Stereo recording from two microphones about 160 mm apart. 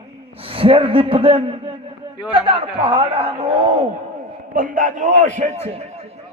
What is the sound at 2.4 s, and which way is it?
A man's voice, 35° right (ahead or behind).